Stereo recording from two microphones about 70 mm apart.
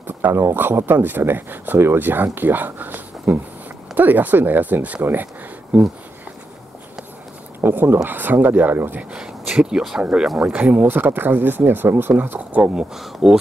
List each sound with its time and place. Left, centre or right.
0.0 s speech: right
5.0 s a sound: right
7.6 s speech: right
9.1 s speech: centre
10.4 s speech: right
12.7 s speech: centre